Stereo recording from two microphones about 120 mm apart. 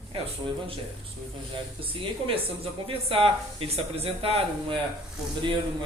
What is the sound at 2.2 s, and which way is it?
Speech, 50° right (ahead or behind).